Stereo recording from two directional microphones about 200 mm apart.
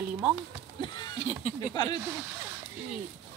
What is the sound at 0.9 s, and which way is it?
Speech, 20° left (ahead or behind).